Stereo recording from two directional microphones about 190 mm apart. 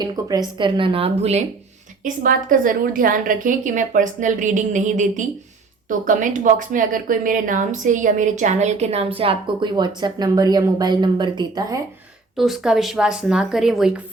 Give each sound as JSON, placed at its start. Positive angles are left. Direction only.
{"t": 0.0, "sound": "speech", "side_deg": -20}
{"t": 2.0, "sound": "a woman's voice", "side_deg": -45}
{"t": 12.4, "sound": "a woman's voice", "side_deg": 0}